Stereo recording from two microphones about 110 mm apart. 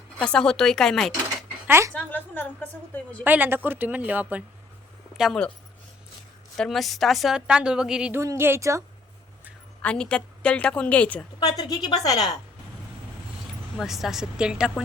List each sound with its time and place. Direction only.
0.2 s a woman's voice: 10° left (ahead or behind)
1.6 s speech: 20° right (ahead or behind)
1.9 s a woman's voice: 15° left (ahead or behind)
3.2 s speech: 15° right (ahead or behind)
5.1 s speech: 5° right (ahead or behind)
6.6 s a woman's voice: centre (ahead or behind)
8.1 s a woman's voice: 25° right (ahead or behind)
9.8 s a woman's voice: 10° left (ahead or behind)
11.3 s a woman's voice: 40° left (ahead or behind)
13.7 s a woman's voice: centre (ahead or behind)